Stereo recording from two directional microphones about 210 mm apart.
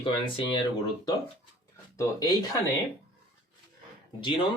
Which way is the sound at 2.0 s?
20° left (ahead or behind).